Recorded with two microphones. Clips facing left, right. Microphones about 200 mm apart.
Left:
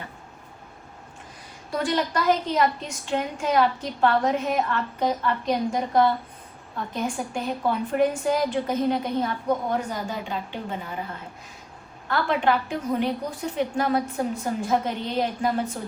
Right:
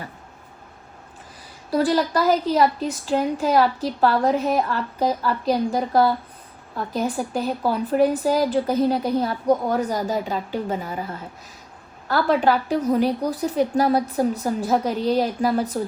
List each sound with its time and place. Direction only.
1.7 s a woman's voice: 35° right (ahead or behind)
12.0 s a woman's voice: 35° right (ahead or behind)